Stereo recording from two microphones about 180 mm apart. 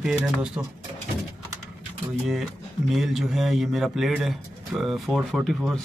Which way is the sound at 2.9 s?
Centre (ahead or behind).